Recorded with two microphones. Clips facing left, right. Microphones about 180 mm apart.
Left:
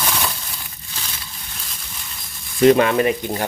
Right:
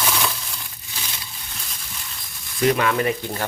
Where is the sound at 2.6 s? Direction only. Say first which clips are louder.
Left 6 dB; 25° left (ahead or behind).